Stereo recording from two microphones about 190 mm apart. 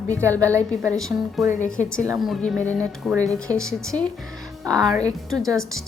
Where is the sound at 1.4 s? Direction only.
40° left (ahead or behind).